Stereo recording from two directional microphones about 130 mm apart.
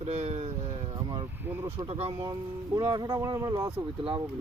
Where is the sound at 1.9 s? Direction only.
50° right (ahead or behind).